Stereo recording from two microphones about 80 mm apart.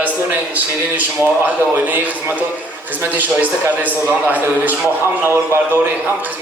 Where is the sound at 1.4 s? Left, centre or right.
Right.